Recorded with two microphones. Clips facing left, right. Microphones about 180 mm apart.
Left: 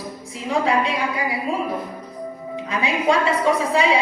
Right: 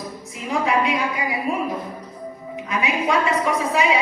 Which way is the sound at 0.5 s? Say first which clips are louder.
Left 1 dB; 30° left (ahead or behind).